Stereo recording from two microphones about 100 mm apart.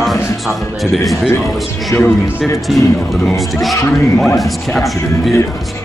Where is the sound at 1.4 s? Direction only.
Centre (ahead or behind).